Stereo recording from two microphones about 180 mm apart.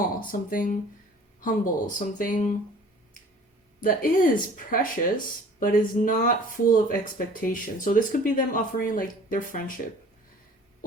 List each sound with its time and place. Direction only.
0.3 s speech: 50° left (ahead or behind)
3.8 s speech: 50° left (ahead or behind)